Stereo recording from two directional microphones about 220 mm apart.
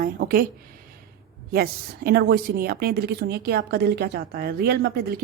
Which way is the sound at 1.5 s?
45° right (ahead or behind).